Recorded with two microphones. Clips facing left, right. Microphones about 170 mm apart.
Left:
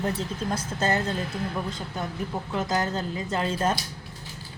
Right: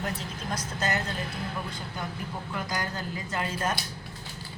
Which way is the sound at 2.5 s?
25° left (ahead or behind).